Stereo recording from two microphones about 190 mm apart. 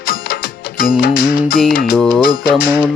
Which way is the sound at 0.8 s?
50° left (ahead or behind).